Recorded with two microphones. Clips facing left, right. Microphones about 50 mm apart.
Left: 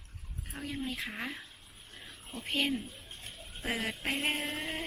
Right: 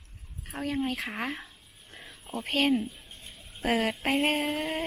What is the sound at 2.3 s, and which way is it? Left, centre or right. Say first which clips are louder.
Speech: right 5 dB; right.